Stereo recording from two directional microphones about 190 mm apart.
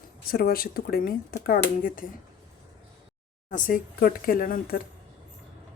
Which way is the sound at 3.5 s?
50° left (ahead or behind).